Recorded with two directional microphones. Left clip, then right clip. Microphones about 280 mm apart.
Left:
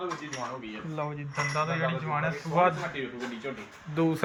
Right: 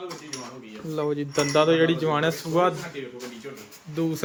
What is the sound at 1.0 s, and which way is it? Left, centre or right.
Speech, right.